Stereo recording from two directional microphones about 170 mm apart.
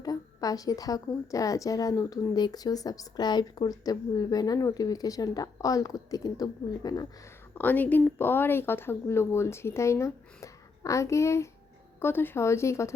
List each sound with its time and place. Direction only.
0.0 s a woman's voice: 20° left (ahead or behind)
7.5 s speech: 10° left (ahead or behind)